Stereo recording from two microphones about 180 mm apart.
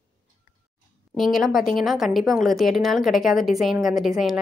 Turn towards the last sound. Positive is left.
turn(degrees=0)  # may be behind; listen again after turning